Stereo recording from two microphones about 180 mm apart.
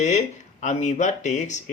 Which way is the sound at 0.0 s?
40° left (ahead or behind).